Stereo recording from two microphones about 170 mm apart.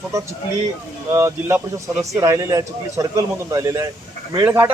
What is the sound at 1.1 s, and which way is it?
A man's voice, 15° right (ahead or behind).